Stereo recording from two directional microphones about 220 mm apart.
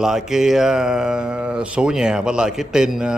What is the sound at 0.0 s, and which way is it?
Speech, centre (ahead or behind).